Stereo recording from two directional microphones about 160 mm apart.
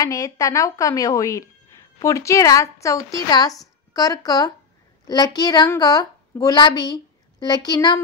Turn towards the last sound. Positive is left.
turn(degrees=25)  # may be behind; listen again after turning